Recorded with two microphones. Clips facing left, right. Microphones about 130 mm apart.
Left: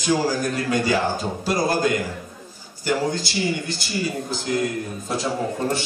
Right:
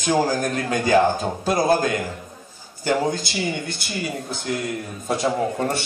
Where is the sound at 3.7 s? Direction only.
55° right (ahead or behind).